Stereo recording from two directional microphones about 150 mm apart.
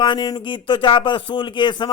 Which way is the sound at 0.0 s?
30° left (ahead or behind).